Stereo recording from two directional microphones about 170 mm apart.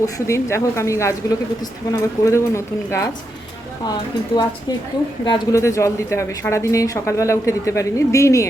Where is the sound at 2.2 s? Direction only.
15° left (ahead or behind).